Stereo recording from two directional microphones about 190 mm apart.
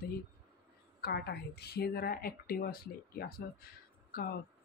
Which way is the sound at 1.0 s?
55° left (ahead or behind).